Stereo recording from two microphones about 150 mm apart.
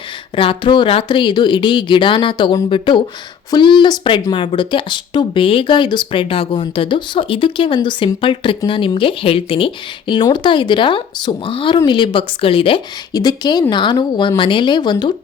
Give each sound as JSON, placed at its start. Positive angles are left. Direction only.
{"t": 0.3, "sound": "speech", "side_deg": 35}